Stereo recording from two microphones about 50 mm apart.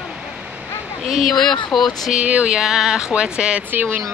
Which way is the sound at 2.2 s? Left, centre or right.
Right.